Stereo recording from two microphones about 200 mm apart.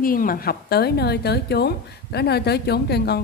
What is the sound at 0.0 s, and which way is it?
A woman's voice, 45° left (ahead or behind).